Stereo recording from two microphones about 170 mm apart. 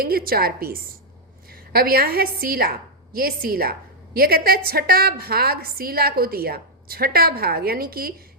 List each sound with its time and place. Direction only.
0.0 s a woman's voice: 60° right (ahead or behind)